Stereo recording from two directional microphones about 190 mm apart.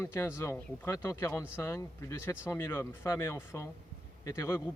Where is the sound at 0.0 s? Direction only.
15° left (ahead or behind).